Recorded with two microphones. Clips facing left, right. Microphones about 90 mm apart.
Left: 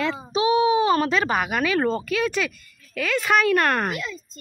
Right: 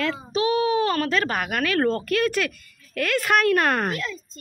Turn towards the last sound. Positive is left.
turn(degrees=15)  # may be behind; listen again after turning